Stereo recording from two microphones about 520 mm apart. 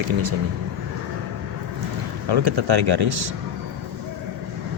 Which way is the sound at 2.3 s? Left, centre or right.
Right.